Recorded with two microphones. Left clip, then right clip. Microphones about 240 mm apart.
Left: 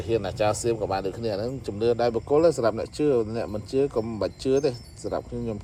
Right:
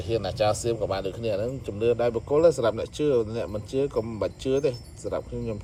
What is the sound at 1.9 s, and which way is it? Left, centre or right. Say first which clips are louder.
Speech: left 1 dB; left.